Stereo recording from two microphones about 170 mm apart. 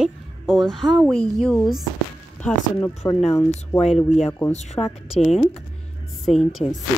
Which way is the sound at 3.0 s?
15° left (ahead or behind).